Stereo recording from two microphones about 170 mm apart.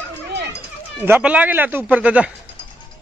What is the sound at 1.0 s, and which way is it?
Speech, 10° right (ahead or behind).